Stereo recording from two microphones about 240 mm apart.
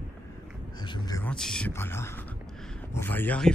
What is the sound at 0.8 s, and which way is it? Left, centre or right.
Speech, centre.